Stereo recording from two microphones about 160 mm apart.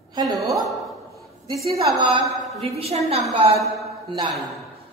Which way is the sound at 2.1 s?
35° right (ahead or behind).